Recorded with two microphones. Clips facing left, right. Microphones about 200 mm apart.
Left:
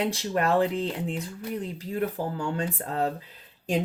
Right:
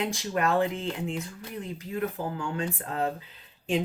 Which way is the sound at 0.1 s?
35° left (ahead or behind).